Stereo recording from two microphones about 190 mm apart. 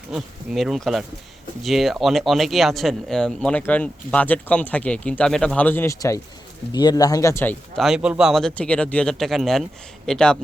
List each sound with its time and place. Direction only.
0.1 s speech: centre (ahead or behind); by 7.5 s 15° left (ahead or behind)
7.8 s speech: centre (ahead or behind)